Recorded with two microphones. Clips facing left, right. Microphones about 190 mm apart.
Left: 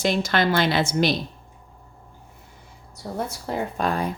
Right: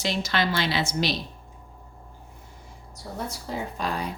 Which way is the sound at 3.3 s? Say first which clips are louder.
Left 4 dB; 55° left (ahead or behind).